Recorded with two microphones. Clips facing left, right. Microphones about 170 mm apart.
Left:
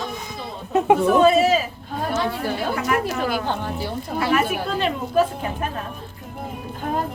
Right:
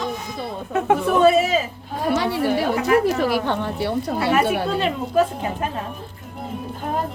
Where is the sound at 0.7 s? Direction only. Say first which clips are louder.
Left 2 dB; 15° left (ahead or behind).